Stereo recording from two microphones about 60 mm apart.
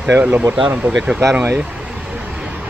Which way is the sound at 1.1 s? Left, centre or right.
Centre.